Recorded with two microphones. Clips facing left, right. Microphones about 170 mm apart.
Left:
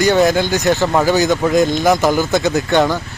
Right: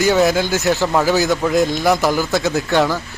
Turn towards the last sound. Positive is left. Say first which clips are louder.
# left 2 dB
turn(degrees=0)  # may be behind; listen again after turning